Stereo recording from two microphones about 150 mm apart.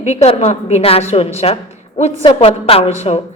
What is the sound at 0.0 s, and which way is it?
A woman's voice, 45° left (ahead or behind).